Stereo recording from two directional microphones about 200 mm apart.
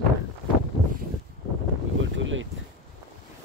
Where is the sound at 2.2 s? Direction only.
75° right (ahead or behind).